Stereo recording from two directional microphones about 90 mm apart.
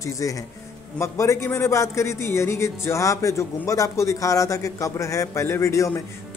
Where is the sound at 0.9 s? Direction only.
30° left (ahead or behind).